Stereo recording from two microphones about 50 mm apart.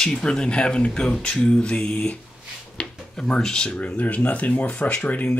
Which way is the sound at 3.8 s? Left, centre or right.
Left.